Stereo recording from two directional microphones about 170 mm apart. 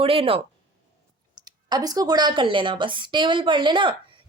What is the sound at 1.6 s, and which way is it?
A woman's voice, 25° right (ahead or behind).